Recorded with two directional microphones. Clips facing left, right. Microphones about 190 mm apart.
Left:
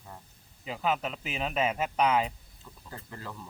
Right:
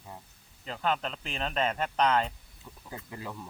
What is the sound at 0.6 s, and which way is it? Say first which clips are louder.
Speech: left 1 dB; 5° left (ahead or behind).